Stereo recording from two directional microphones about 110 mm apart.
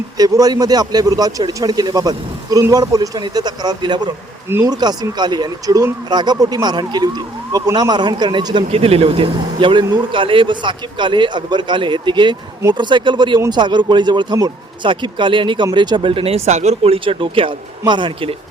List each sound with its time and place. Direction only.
0.2 s a man's voice: 35° right (ahead or behind)
4.4 s speech: 20° right (ahead or behind)
4.7 s a man's voice: 40° right (ahead or behind)
8.7 s speech: 60° right (ahead or behind)